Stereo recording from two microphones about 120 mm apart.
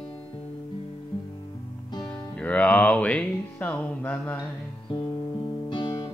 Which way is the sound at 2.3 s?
10° left (ahead or behind).